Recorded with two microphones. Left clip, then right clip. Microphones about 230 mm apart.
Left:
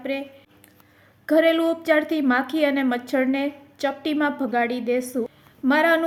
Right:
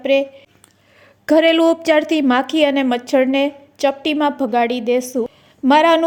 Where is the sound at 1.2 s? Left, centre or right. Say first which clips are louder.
Right 6 dB; right.